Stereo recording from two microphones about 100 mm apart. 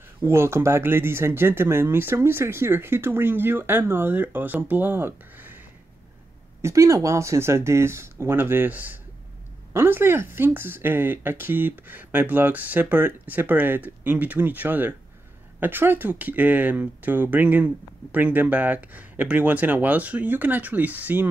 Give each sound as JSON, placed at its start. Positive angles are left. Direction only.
{"t": 0.2, "sound": "speech", "side_deg": -25}
{"t": 6.6, "sound": "speech", "side_deg": -30}